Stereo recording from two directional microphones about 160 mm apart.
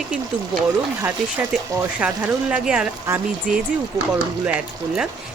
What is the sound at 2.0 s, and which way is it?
Speech, 10° right (ahead or behind).